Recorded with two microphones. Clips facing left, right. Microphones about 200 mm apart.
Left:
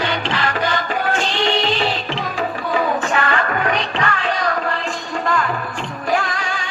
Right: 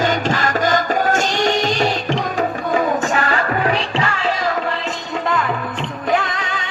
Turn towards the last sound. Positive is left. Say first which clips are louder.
# right 1 dB
turn(degrees=-20)  # may be behind; listen again after turning